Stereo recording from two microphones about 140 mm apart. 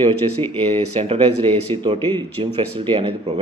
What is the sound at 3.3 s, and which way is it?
Speech, 50° right (ahead or behind).